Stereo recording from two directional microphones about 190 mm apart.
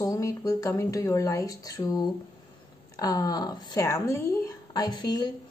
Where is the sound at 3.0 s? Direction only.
20° left (ahead or behind).